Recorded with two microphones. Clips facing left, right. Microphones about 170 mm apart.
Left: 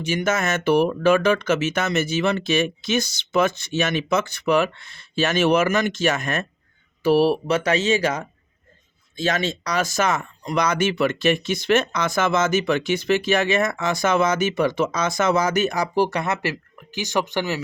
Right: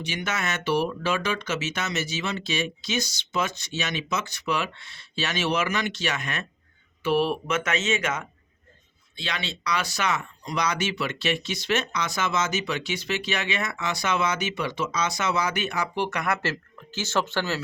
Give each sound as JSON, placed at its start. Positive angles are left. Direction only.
{"t": 0.0, "sound": "speech", "side_deg": 45}